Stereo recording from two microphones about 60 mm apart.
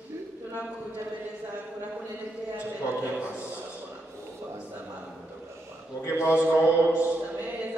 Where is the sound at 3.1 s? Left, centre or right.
Right.